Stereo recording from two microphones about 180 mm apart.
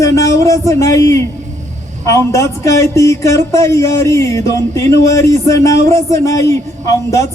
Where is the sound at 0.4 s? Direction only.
15° left (ahead or behind).